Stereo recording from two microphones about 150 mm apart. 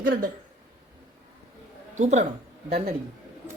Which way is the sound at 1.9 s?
50° right (ahead or behind).